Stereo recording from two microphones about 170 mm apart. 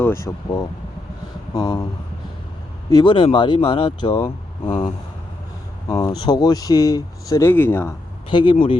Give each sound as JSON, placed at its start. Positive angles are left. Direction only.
{"t": 0.0, "sound": "speech", "side_deg": 15}
{"t": 2.9, "sound": "speech", "side_deg": 30}
{"t": 5.9, "sound": "speech", "side_deg": 25}
{"t": 8.3, "sound": "speech", "side_deg": 30}